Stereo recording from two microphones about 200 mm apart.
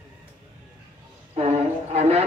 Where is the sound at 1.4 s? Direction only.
30° right (ahead or behind).